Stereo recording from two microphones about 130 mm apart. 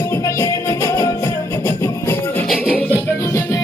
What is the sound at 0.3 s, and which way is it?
Music, 25° left (ahead or behind).